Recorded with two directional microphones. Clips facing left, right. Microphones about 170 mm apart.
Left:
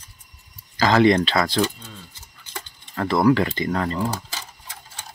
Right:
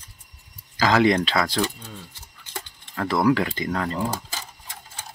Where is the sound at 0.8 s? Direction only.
5° right (ahead or behind).